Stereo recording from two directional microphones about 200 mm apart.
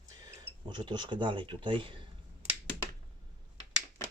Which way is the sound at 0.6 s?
20° right (ahead or behind).